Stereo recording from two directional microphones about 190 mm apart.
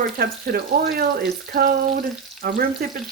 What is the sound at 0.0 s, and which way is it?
Frying, 50° right (ahead or behind).